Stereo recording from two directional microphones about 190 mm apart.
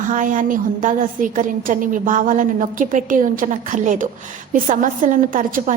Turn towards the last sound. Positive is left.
turn(degrees=-45)  # may be behind; listen again after turning